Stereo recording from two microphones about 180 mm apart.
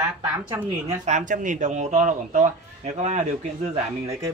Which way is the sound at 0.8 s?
40° right (ahead or behind).